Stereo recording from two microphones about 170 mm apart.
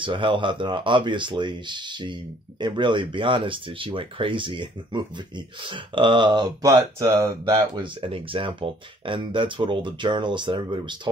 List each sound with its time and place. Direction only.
0.0 s speech: 30° right (ahead or behind)
7.7 s speech: 30° right (ahead or behind)